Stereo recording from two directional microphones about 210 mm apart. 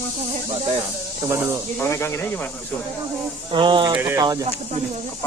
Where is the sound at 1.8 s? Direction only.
10° left (ahead or behind).